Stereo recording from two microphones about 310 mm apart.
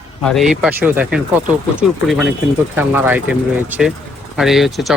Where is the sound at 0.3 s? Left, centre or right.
Centre.